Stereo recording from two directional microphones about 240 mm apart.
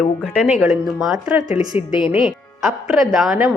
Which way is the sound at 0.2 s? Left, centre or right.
Centre.